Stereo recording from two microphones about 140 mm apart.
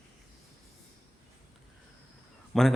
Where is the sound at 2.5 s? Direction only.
Centre (ahead or behind).